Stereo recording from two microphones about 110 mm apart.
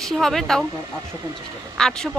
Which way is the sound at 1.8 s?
5° left (ahead or behind).